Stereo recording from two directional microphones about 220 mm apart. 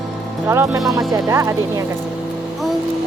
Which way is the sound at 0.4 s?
15° right (ahead or behind).